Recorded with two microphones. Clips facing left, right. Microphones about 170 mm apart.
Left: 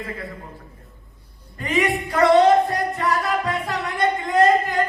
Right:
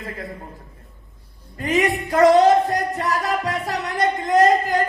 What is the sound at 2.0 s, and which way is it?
Music, 40° right (ahead or behind).